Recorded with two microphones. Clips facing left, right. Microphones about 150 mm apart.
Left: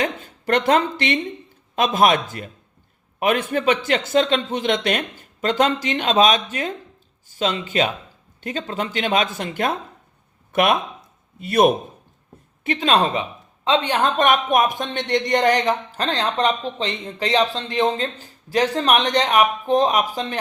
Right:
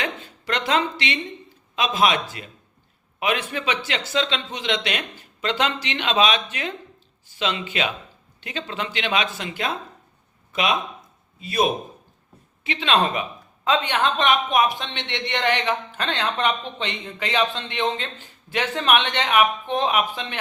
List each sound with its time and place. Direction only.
0.0 s a man's voice: 50° left (ahead or behind)
12.6 s speech: 45° left (ahead or behind)